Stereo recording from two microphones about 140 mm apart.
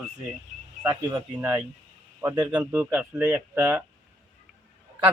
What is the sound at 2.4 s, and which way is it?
Speech, 25° right (ahead or behind).